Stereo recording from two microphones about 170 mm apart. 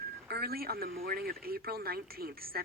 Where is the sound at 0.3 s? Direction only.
65° right (ahead or behind).